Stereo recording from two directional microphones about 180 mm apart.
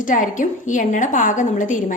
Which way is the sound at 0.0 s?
45° left (ahead or behind).